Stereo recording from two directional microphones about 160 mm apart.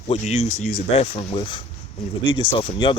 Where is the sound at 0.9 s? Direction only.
40° left (ahead or behind).